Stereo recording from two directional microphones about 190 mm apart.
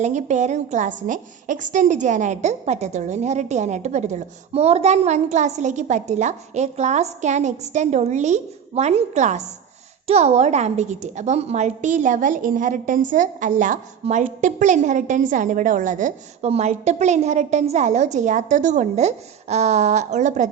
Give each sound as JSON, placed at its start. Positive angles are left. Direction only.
{"t": 0.0, "sound": "a woman's voice", "side_deg": -40}